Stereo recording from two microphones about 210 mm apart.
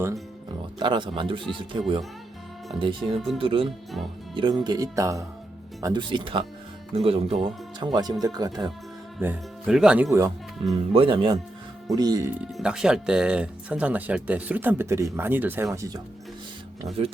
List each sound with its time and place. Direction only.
0.8 s speech: 20° right (ahead or behind)
9.1 s speech: 5° right (ahead or behind)
10.8 s speech: 25° right (ahead or behind)
12.5 s speech: 5° right (ahead or behind)